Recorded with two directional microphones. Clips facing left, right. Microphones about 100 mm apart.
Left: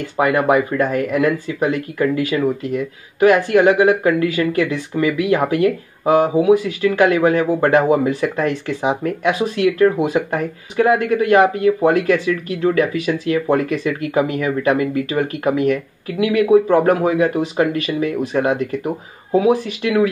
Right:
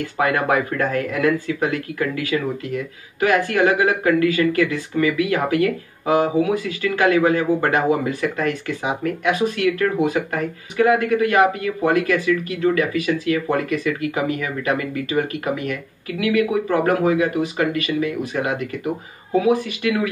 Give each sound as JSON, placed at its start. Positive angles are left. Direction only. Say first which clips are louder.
{"t": 0.2, "sound": "speech", "louder": "left 4 dB", "side_deg": 20}